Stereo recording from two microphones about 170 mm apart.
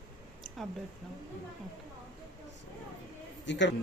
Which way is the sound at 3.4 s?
90° left.